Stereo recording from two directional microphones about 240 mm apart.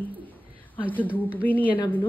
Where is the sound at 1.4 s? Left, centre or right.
Centre.